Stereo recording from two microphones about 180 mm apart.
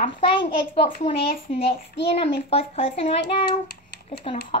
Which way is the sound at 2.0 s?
30° left (ahead or behind).